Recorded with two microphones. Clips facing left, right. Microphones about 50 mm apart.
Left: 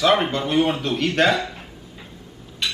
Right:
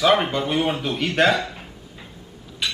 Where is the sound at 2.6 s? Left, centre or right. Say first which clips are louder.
Even; centre.